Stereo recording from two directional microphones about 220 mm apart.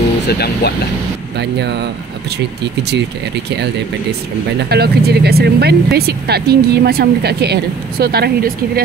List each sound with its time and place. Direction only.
0.3 s speech: 45° left (ahead or behind)
4.6 s speech: 45° right (ahead or behind)